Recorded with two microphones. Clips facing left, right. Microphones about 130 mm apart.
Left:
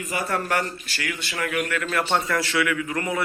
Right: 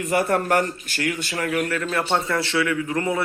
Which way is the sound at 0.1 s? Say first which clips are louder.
Right 5 dB; 50° right (ahead or behind).